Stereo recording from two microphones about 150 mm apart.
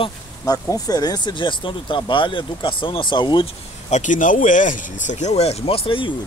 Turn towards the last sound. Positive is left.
turn(degrees=35)  # may be behind; listen again after turning